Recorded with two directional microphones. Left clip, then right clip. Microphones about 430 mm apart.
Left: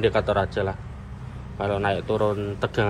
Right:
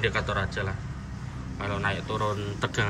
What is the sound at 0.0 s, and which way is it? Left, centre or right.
Speech, centre.